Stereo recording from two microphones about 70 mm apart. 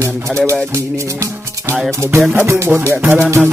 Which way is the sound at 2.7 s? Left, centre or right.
Centre.